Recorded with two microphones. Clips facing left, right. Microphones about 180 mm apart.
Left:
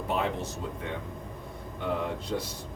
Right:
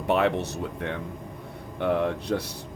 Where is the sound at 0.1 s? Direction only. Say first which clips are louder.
Right 8 dB; 70° right (ahead or behind).